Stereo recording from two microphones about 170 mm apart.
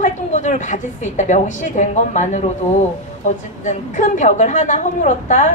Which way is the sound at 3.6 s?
45° left (ahead or behind).